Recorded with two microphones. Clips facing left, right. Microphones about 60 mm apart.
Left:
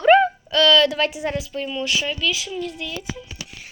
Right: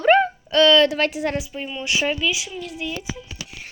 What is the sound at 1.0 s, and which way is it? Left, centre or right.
Speech, right.